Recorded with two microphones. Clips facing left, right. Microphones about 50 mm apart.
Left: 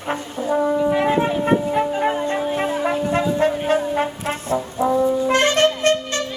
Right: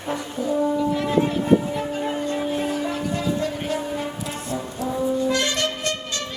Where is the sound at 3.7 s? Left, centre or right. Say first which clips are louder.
Left 7 dB; left.